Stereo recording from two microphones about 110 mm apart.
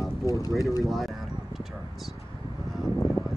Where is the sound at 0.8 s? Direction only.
Centre (ahead or behind).